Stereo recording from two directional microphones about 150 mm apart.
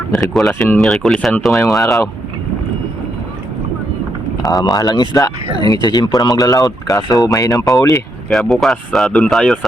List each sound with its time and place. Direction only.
0.1 s speech: centre (ahead or behind)
4.4 s speech: 25° left (ahead or behind)
8.3 s speech: centre (ahead or behind)